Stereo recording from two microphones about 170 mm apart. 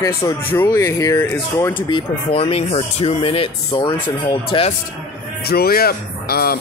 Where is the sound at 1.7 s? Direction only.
30° left (ahead or behind).